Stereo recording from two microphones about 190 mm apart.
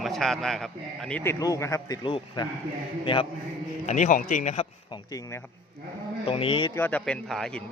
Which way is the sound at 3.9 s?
40° left (ahead or behind).